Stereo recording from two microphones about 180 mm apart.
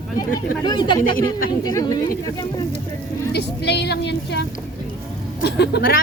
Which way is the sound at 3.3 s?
65° left (ahead or behind).